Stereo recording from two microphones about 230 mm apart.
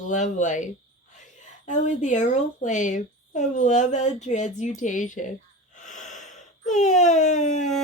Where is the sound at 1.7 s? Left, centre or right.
Left.